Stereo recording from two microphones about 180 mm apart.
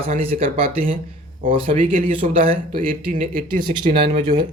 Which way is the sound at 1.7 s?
50° right (ahead or behind).